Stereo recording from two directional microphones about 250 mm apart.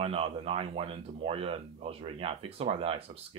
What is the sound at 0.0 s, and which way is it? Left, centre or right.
Speech, right.